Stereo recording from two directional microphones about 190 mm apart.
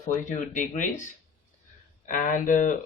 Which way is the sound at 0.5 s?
40° left (ahead or behind).